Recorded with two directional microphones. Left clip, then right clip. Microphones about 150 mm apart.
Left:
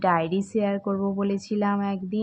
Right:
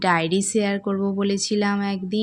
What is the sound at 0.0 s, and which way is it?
Speech, 30° right (ahead or behind).